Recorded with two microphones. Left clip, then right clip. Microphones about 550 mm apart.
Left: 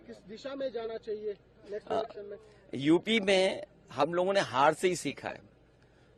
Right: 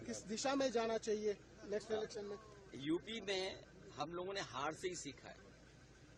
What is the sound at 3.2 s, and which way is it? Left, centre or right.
A man's voice, left.